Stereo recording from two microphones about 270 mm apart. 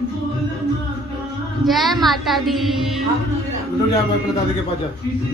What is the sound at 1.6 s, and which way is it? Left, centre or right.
Speech, centre.